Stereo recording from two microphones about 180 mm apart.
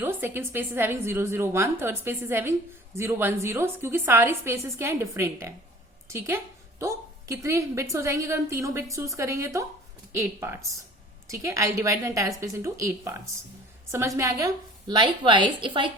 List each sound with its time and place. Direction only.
0.0 s a woman's voice: 10° right (ahead or behind); by 15.9 s 25° right (ahead or behind)